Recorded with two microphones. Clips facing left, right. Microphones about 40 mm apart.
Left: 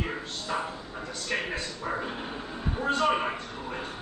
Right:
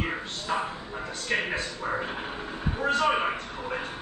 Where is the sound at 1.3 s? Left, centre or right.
Centre.